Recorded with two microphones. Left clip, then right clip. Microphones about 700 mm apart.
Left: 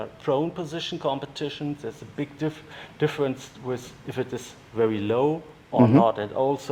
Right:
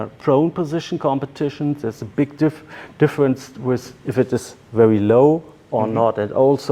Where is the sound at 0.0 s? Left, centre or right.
Right.